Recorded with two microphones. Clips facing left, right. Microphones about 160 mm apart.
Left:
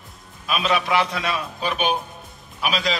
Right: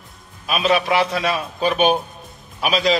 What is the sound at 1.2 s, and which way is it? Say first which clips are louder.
Speech: right 5 dB; 35° right (ahead or behind).